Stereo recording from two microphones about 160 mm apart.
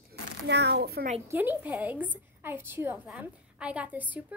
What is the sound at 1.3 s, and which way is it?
A woman's voice, 10° right (ahead or behind).